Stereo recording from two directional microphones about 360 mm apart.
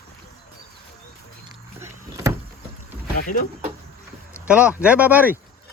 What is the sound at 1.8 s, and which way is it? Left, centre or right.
Power windows, centre.